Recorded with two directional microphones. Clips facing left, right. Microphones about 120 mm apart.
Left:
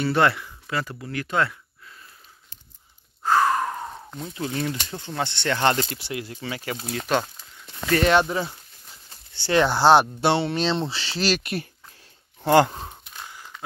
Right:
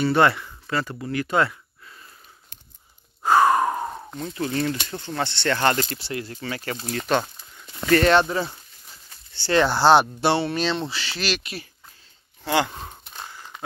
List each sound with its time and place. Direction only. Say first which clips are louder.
0.0 s speech: right 2 dB; centre (ahead or behind)
3.3 s sigh: right 3 dB; 15° right (ahead or behind)
4.2 s speech: right 3 dB; 10° left (ahead or behind)
10.3 s speech: even; 25° left (ahead or behind)
11.3 s speech: left 5 dB; 55° left (ahead or behind)
12.7 s a sound: left 1 dB; 10° left (ahead or behind)
13.0 s a sound: right 2 dB; 25° right (ahead or behind)